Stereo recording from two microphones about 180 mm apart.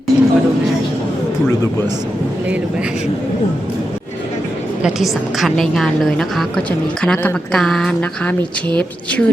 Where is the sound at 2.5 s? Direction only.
5° right (ahead or behind).